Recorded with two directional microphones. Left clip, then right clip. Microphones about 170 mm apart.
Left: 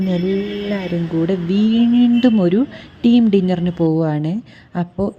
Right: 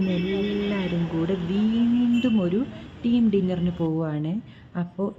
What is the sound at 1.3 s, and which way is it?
A woman's voice, 40° left (ahead or behind).